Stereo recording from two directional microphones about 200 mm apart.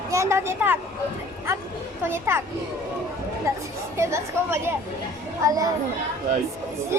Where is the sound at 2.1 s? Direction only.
10° right (ahead or behind).